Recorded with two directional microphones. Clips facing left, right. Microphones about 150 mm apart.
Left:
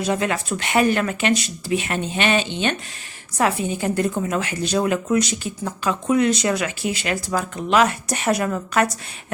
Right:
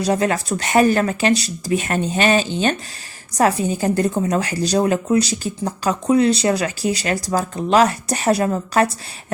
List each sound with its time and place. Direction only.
0.0 s speech: 35° right (ahead or behind)